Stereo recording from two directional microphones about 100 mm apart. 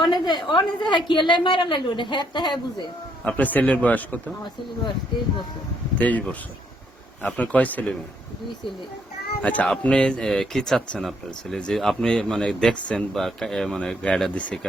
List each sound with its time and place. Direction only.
0.0 s a woman's voice: 50° left (ahead or behind)
3.2 s speech: 15° left (ahead or behind)
6.0 s speech: 15° left (ahead or behind)
9.4 s speech: 15° left (ahead or behind)